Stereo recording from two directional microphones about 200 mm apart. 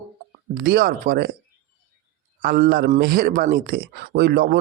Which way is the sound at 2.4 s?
45° right (ahead or behind).